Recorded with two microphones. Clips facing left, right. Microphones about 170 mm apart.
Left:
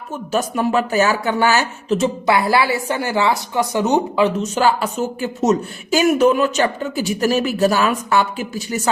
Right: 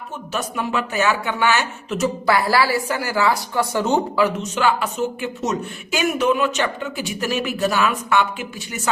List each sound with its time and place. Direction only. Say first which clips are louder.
0.3 s speech: left 6 dB; 40° left (ahead or behind)
2.0 s a woman's voice: even; 20° left (ahead or behind)
4.5 s speech: left 3 dB; 40° left (ahead or behind)